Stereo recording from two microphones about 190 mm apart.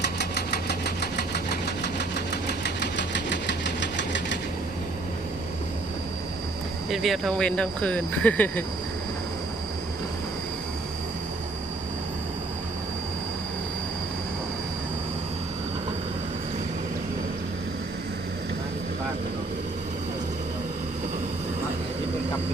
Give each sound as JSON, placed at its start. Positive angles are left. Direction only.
{"t": 0.2, "sound": "engine", "side_deg": 60}
{"t": 6.9, "sound": "speech", "side_deg": 0}